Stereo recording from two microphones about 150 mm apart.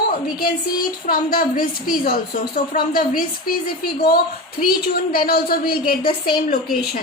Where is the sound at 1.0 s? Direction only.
75° left (ahead or behind).